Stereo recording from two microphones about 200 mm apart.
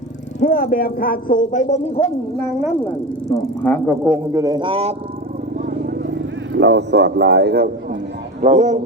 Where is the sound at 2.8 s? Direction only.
5° left (ahead or behind).